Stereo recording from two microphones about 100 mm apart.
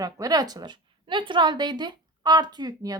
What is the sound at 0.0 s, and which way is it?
A woman's voice, 40° right (ahead or behind).